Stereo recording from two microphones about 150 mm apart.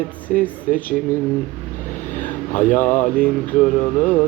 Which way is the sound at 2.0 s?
15° left (ahead or behind).